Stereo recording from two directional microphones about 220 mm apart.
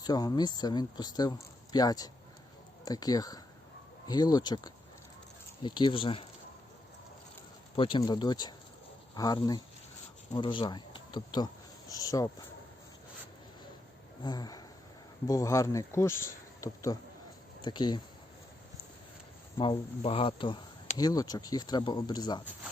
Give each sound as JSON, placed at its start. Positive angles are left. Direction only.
{"t": 0.0, "sound": "speech", "side_deg": 15}
{"t": 7.8, "sound": "speech", "side_deg": 20}
{"t": 14.2, "sound": "speech", "side_deg": 20}
{"t": 19.5, "sound": "speech", "side_deg": 25}